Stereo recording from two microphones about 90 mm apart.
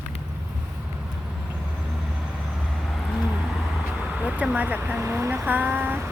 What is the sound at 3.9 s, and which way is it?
Speech, 10° right (ahead or behind).